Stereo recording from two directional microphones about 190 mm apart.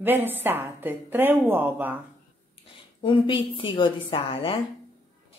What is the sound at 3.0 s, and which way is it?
A woman's voice, 25° left (ahead or behind).